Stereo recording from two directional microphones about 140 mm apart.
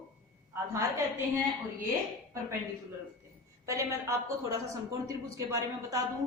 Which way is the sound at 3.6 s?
20° right (ahead or behind).